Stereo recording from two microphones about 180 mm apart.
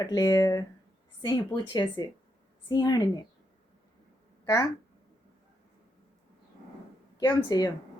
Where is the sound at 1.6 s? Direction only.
25° left (ahead or behind).